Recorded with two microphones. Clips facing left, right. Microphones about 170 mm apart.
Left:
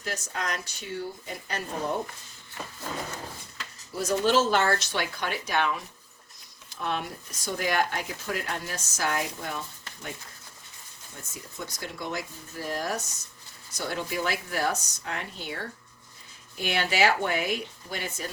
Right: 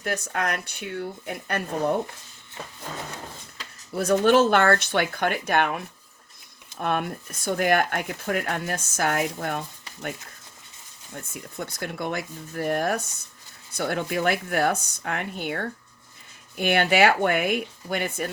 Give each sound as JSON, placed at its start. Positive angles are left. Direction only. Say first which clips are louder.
{"t": 0.0, "sound": "speech", "louder": "right 6 dB", "side_deg": -60}
{"t": 3.9, "sound": "speech", "louder": "right 5 dB", "side_deg": -60}
{"t": 11.1, "sound": "speech", "louder": "right 7 dB", "side_deg": -60}